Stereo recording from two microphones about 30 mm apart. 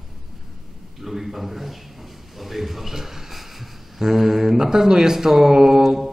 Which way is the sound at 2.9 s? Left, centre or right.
Centre.